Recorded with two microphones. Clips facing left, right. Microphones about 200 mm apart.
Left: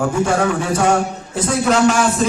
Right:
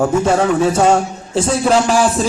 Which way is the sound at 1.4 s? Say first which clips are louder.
Right 2 dB; 30° right (ahead or behind).